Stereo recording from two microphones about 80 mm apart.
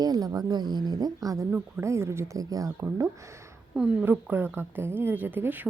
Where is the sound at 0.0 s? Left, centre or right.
Right.